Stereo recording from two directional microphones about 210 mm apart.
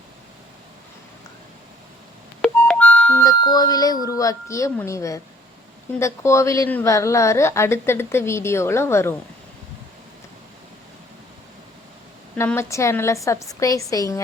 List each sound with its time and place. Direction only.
2.4 s music: 5° left (ahead or behind)
3.4 s a woman's voice: 20° left (ahead or behind)
12.4 s a woman's voice: 10° left (ahead or behind)